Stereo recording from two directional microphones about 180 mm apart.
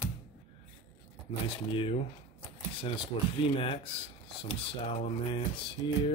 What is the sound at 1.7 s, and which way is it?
Speech, 30° left (ahead or behind).